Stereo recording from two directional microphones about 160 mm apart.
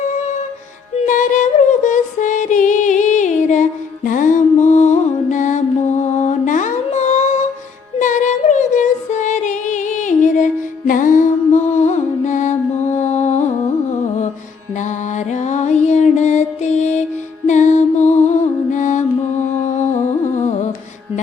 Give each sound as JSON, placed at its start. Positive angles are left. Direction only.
{"t": 1.0, "sound": "music", "side_deg": 55}
{"t": 14.8, "sound": "music", "side_deg": 50}